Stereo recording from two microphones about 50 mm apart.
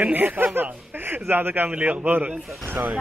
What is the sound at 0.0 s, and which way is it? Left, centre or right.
A man's voice, right.